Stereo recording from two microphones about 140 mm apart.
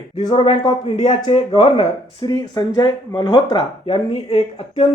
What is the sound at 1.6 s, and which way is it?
Speech, 45° left (ahead or behind).